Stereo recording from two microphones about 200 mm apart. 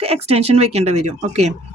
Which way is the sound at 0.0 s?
30° right (ahead or behind).